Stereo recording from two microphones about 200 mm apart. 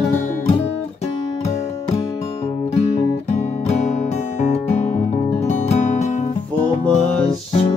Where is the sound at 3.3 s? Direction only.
35° left (ahead or behind).